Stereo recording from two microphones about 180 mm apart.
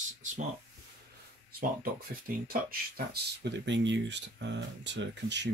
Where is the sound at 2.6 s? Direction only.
60° right (ahead or behind); by 5.5 s 75° right (ahead or behind).